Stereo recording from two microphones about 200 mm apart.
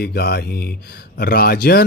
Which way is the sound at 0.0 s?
50° left (ahead or behind).